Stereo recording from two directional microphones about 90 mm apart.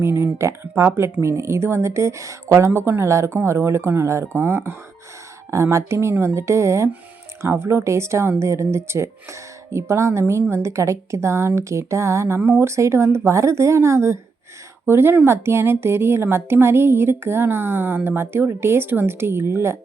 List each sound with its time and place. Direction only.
0.0 s a woman's voice: 30° right (ahead or behind)
5.5 s a woman's voice: 35° right (ahead or behind)